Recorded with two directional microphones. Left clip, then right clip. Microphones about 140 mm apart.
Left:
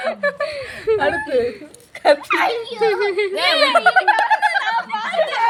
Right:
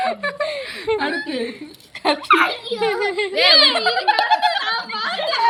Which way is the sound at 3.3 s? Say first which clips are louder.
Right 3 dB; 40° left (ahead or behind).